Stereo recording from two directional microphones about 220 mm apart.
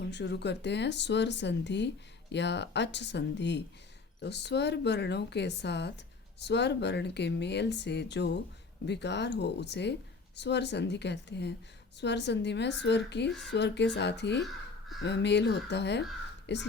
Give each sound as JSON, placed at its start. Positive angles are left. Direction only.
{"t": 0.0, "sound": "speech", "side_deg": 50}